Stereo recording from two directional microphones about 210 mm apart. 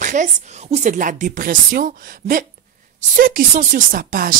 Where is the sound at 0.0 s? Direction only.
35° right (ahead or behind).